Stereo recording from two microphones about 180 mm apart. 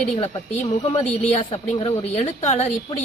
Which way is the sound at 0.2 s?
40° left (ahead or behind).